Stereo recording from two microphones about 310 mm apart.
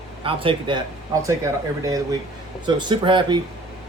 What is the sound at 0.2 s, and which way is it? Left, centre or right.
Speech, centre.